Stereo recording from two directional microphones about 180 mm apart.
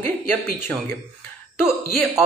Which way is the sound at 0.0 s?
10° left (ahead or behind).